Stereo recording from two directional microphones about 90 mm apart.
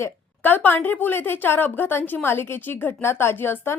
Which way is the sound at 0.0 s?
20° left (ahead or behind).